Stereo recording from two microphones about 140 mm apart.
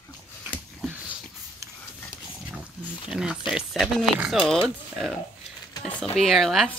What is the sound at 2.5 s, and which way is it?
Wild animals, 5° right (ahead or behind).